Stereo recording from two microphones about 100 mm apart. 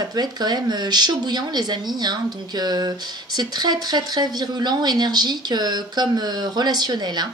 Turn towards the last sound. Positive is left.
turn(degrees=-45)  # may be behind; listen again after turning